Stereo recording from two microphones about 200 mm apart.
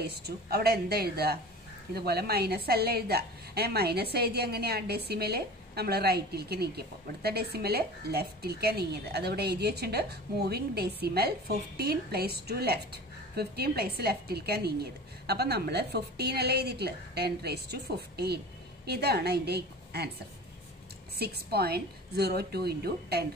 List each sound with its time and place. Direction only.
0.0 s a woman's voice: 50° right (ahead or behind)
21.2 s a woman's voice: 50° right (ahead or behind)